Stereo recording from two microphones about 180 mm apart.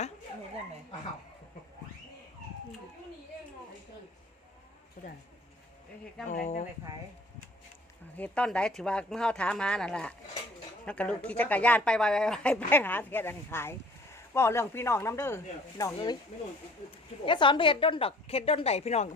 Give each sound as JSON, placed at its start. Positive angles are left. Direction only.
{"t": 5.0, "sound": "speech", "side_deg": 55}
{"t": 6.2, "sound": "speech", "side_deg": 45}
{"t": 8.1, "sound": "speech", "side_deg": 5}
{"t": 17.2, "sound": "a woman's voice", "side_deg": 25}